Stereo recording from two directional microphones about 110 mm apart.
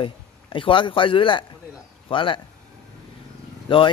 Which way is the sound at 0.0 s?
50° left (ahead or behind).